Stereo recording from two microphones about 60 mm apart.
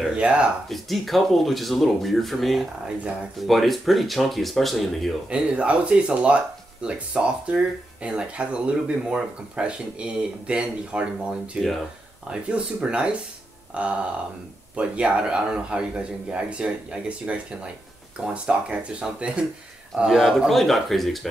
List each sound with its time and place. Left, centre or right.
0.1 s speech: centre
0.7 s speech: centre
5.3 s speech: centre
20.1 s speech: centre